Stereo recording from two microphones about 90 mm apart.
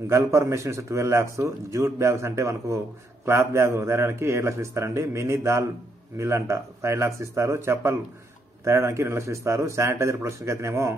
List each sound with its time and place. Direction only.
0.1 s a man's voice: 30° right (ahead or behind)